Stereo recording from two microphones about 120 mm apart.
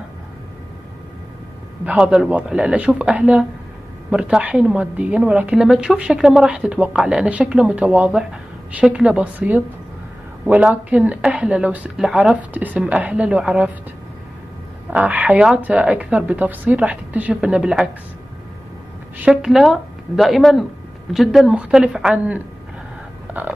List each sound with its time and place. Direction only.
1.9 s a woman's voice: 5° right (ahead or behind)
14.9 s a woman's voice: 10° right (ahead or behind)
19.1 s a woman's voice: 10° right (ahead or behind)